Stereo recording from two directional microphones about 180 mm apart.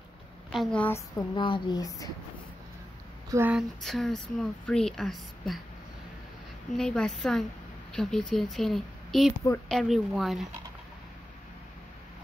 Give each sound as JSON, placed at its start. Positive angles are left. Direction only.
{"t": 0.5, "sound": "speech", "side_deg": 0}
{"t": 3.3, "sound": "speech", "side_deg": -15}
{"t": 3.5, "sound": "speech", "side_deg": 0}
{"t": 6.8, "sound": "speech", "side_deg": 5}